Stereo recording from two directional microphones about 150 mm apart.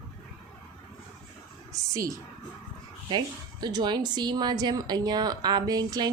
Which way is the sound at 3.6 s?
30° right (ahead or behind).